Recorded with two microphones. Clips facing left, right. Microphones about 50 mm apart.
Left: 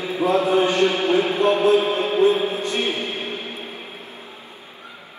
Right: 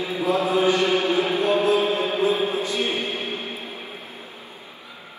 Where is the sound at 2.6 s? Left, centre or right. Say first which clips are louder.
Left 1 dB; left.